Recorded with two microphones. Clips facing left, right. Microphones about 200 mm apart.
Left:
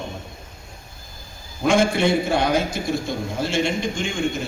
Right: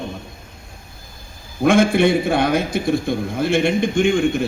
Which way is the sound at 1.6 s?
55° right (ahead or behind).